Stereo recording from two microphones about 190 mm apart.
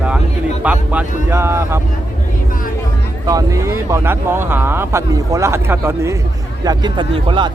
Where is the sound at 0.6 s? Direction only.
5° right (ahead or behind).